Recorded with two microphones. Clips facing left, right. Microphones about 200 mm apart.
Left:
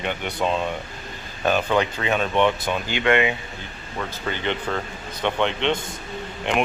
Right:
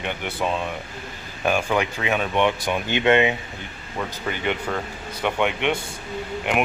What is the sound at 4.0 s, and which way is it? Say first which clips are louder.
Speech: right 1 dB; 10° right (ahead or behind).